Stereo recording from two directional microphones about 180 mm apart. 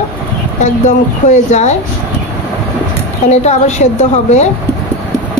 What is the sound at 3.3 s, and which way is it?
A woman's voice, 40° left (ahead or behind).